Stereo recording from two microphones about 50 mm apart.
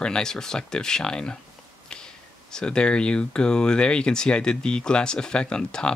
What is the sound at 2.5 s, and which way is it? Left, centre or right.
Speech, centre.